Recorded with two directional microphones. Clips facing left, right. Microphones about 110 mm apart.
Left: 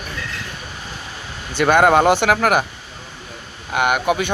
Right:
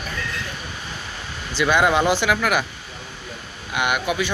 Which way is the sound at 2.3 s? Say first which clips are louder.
Left 4 dB; 45° left (ahead or behind).